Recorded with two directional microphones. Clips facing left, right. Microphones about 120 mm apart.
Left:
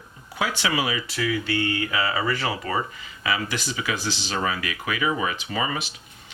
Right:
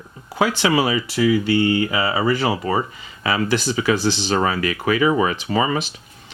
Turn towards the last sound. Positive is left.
turn(degrees=-35)  # may be behind; listen again after turning